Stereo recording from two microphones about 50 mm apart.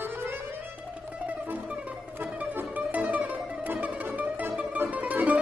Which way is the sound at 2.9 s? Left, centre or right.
Right.